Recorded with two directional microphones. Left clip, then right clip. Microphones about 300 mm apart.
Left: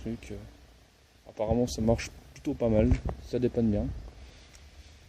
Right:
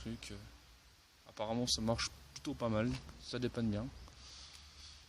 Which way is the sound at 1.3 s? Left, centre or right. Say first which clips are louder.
Left 8 dB; right.